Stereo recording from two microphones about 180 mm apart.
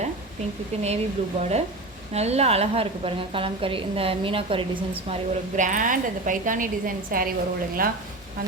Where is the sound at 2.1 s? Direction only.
35° right (ahead or behind).